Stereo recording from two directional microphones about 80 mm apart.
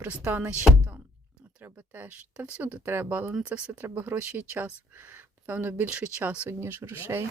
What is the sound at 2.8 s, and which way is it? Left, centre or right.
Speech, right.